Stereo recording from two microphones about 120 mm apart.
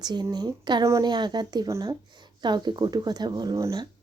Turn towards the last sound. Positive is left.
turn(degrees=-30)  # may be behind; listen again after turning